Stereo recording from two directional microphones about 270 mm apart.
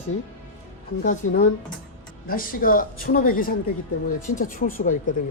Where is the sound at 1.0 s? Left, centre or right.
Left.